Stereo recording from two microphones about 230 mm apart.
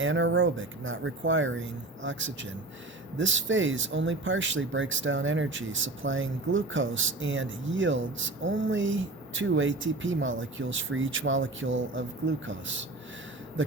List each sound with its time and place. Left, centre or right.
0.0 s speech: right